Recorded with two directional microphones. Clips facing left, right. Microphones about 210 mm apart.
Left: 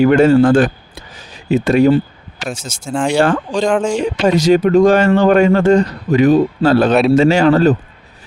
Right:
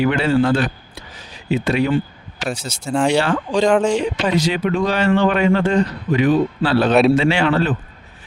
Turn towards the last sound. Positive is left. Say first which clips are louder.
# left 7 dB
turn(degrees=40)  # may be behind; listen again after turning